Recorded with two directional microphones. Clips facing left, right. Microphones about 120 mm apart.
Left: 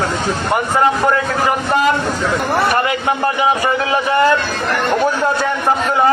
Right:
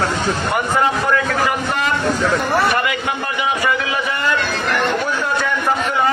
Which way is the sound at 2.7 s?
35° left (ahead or behind).